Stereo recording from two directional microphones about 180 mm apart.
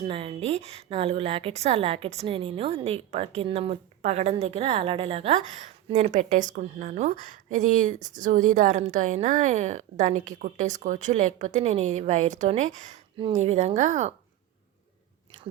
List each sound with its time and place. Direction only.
0.0 s a woman's voice: 30° right (ahead or behind)